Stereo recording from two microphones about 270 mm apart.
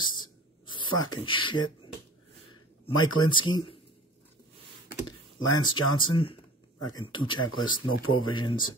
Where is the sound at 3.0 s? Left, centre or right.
Centre.